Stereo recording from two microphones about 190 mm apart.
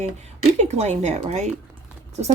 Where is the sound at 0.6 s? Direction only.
35° right (ahead or behind).